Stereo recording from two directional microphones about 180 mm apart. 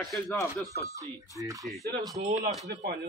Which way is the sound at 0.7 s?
20° right (ahead or behind).